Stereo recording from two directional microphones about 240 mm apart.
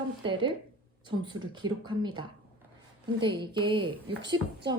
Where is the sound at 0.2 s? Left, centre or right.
Centre.